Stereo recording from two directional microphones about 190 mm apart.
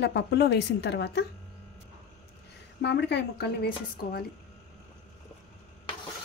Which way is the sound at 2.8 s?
65° left (ahead or behind).